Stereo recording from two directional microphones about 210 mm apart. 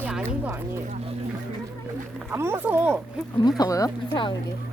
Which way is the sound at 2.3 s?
10° right (ahead or behind).